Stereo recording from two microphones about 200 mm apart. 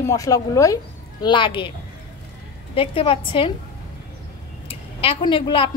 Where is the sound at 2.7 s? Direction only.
25° left (ahead or behind).